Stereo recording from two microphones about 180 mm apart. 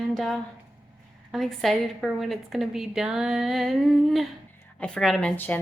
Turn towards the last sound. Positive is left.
turn(degrees=10)  # may be behind; listen again after turning